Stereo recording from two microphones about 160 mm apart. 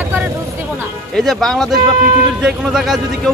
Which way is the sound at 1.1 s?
Centre (ahead or behind).